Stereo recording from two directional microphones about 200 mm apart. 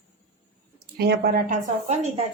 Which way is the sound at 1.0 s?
50° right (ahead or behind).